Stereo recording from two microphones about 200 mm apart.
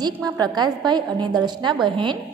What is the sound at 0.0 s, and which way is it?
A woman's voice, 20° right (ahead or behind).